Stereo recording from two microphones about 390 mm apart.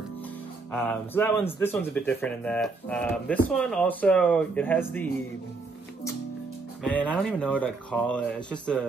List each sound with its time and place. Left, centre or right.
0.7 s speech: centre
6.8 s speech: centre